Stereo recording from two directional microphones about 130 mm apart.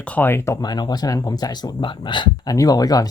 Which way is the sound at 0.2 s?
20° left (ahead or behind).